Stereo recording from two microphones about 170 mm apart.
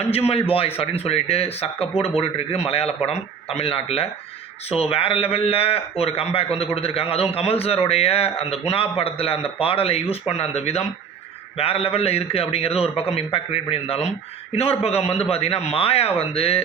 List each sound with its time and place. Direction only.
0.1 s speech: 35° left (ahead or behind)